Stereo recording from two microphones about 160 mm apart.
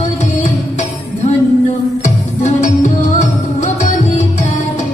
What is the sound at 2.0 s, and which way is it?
Music, 50° left (ahead or behind).